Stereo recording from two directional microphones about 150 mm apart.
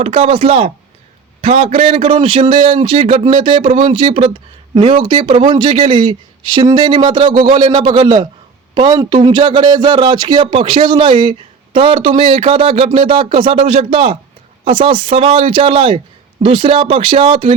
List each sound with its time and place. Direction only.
0.0 s a man's voice: 40° right (ahead or behind)